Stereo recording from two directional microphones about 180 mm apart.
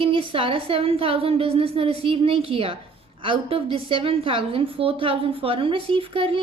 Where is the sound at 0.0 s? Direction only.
30° right (ahead or behind).